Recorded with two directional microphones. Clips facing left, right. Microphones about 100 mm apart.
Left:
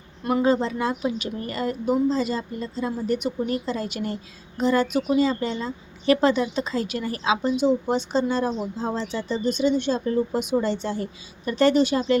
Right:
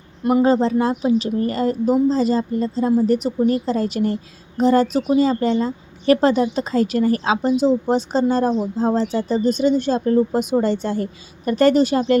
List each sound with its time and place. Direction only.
0.2 s speech: 20° right (ahead or behind)
0.4 s speech: 35° right (ahead or behind)